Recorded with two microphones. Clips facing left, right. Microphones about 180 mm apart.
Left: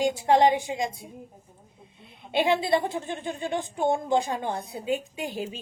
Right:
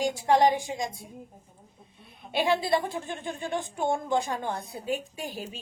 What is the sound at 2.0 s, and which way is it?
A woman's voice, 20° left (ahead or behind).